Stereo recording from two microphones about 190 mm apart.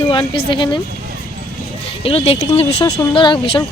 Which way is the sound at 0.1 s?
25° left (ahead or behind).